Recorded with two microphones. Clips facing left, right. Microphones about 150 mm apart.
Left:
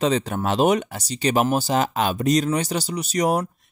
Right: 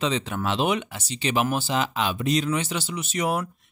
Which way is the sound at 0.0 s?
40° left (ahead or behind).